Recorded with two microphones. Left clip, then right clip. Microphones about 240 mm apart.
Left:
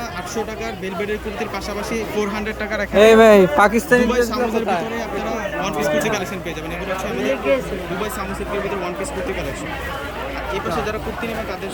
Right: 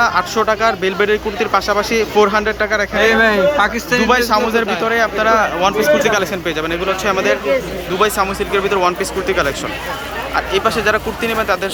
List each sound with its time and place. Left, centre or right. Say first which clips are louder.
0.0 s speech: right 12 dB; centre
3.0 s speech: left 3 dB; left
4.1 s speech: right 6 dB; centre
10.5 s speech: right 8 dB; centre